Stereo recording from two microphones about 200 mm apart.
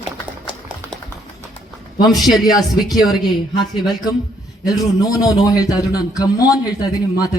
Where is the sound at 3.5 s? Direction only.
20° left (ahead or behind).